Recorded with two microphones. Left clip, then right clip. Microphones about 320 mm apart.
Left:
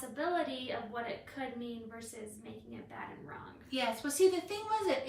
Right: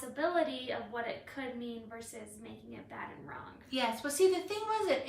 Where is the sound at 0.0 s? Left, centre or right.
Centre.